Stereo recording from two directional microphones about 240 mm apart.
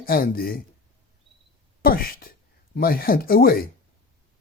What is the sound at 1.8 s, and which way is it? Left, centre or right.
Speech, left.